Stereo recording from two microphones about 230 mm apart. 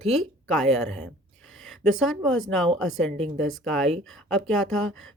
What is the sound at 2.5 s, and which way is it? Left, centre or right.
Speech, centre.